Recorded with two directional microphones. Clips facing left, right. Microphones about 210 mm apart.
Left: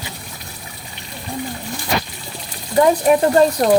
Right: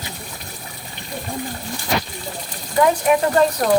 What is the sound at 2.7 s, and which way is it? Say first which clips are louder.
Speech: left 3 dB; 35° left (ahead or behind).